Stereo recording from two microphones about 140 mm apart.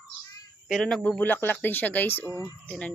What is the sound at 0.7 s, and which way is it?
Speech, centre (ahead or behind).